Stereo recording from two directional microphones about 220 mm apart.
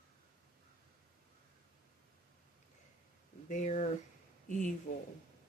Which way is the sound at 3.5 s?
35° left (ahead or behind).